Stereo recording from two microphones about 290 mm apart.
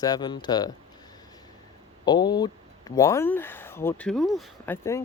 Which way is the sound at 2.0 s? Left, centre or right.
Centre.